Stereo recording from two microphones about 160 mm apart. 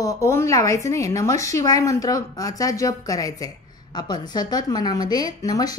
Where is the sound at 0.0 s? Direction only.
20° left (ahead or behind).